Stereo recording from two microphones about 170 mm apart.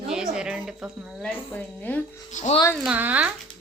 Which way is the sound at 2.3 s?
45° left (ahead or behind).